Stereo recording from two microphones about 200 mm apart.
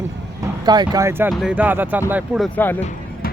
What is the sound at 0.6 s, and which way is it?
Speech, 20° right (ahead or behind).